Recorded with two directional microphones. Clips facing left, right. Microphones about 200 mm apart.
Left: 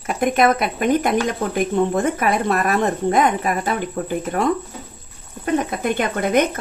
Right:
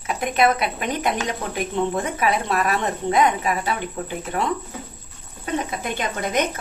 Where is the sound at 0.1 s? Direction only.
50° left (ahead or behind).